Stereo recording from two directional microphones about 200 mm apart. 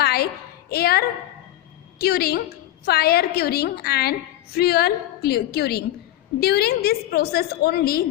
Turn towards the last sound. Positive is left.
turn(degrees=50)  # may be behind; listen again after turning